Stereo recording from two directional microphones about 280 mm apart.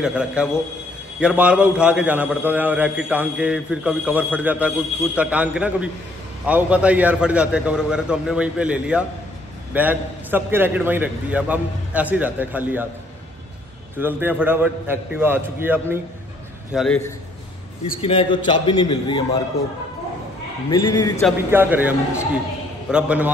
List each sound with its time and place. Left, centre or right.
0.0 s a man's voice: centre
13.9 s a man's voice: centre
18.0 s a man's voice: centre
20.7 s a man's voice: centre
21.2 s a man's voice: centre